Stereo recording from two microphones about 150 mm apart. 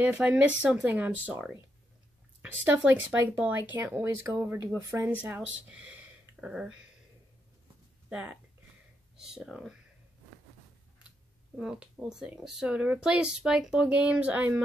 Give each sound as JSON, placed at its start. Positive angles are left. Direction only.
{"t": 0.0, "sound": "speech", "side_deg": -10}
{"t": 2.6, "sound": "speech", "side_deg": -10}
{"t": 8.1, "sound": "speech", "side_deg": -10}
{"t": 11.5, "sound": "speech", "side_deg": -5}